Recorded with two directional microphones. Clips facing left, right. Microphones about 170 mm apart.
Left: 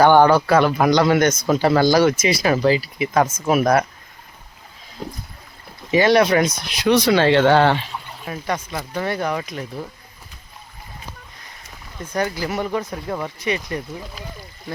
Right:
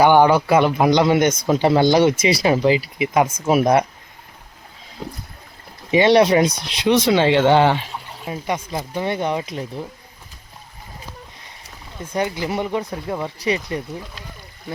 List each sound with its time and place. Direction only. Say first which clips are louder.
0.0 s speech: even; 15° right (ahead or behind)
5.9 s speech: right 1 dB; 25° right (ahead or behind)
12.1 s speech: right 1 dB; 20° right (ahead or behind)